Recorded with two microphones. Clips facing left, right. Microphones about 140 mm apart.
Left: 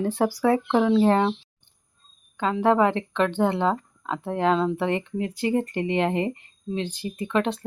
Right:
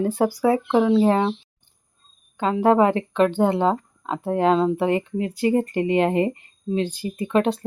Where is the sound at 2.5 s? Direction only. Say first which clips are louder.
Right 3 dB; 35° right (ahead or behind).